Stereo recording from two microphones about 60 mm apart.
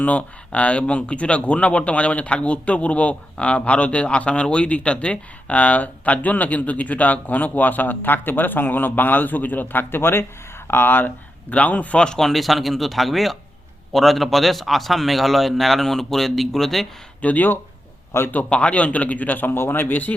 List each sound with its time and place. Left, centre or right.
0.0 s speech: left
11.5 s a man's voice: left; by 16.8 s centre
17.2 s speech: left